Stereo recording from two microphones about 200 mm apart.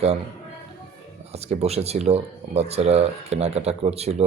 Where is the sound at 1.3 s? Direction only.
30° right (ahead or behind).